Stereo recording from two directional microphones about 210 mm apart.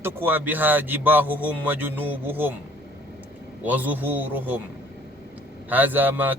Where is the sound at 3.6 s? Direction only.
10° right (ahead or behind).